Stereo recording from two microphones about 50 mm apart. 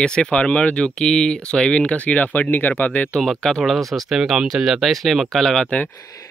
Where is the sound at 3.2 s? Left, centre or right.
Centre.